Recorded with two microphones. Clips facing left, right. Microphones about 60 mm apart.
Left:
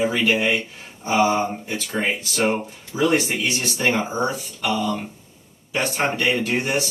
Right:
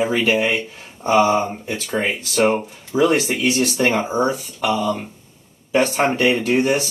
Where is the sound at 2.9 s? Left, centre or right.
Right.